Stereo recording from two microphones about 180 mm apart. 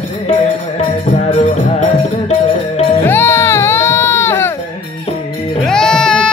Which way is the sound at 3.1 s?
10° left (ahead or behind).